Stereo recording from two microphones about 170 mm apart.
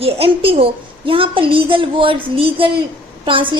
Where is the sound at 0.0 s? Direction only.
35° right (ahead or behind).